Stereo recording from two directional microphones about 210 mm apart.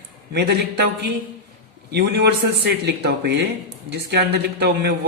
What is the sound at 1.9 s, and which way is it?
Speech, 50° right (ahead or behind).